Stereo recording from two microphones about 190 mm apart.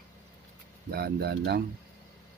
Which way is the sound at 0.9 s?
55° right (ahead or behind).